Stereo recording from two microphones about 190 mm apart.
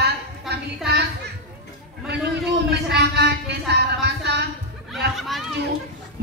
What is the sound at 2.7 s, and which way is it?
Speech, 60° right (ahead or behind).